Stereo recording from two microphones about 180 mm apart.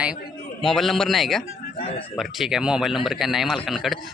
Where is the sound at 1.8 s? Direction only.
30° left (ahead or behind).